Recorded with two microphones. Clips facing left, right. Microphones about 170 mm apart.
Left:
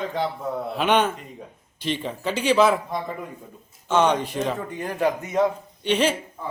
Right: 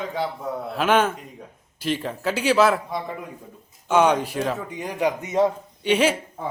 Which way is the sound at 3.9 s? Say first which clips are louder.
Right 2 dB; 10° right (ahead or behind).